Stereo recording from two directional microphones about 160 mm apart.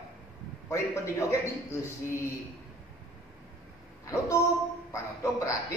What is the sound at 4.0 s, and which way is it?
Speech, 20° left (ahead or behind).